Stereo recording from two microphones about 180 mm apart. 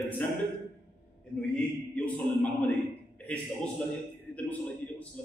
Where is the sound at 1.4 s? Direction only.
5° left (ahead or behind).